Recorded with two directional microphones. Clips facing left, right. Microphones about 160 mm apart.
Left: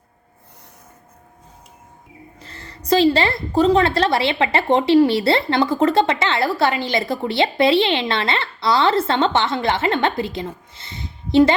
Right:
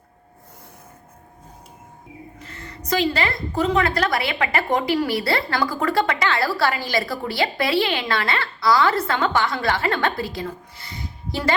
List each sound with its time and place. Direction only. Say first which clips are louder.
2.4 s a woman's voice: right 2 dB; 30° left (ahead or behind)